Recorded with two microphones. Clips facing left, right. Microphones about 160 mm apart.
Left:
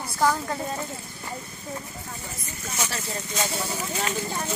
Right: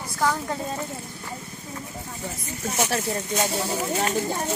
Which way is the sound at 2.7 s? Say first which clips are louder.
Right 6 dB; 55° right (ahead or behind).